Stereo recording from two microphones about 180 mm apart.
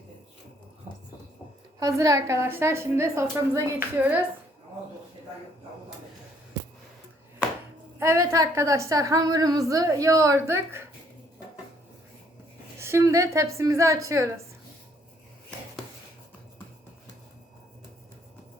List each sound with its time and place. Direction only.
1.8 s a woman's voice: 20° right (ahead or behind)
7.9 s a woman's voice: 15° right (ahead or behind)
12.8 s a woman's voice: 15° right (ahead or behind)